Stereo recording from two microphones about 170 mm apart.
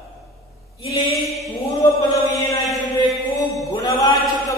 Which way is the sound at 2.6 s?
Centre (ahead or behind).